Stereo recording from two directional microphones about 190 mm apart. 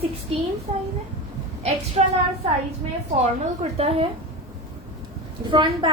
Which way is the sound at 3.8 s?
30° right (ahead or behind).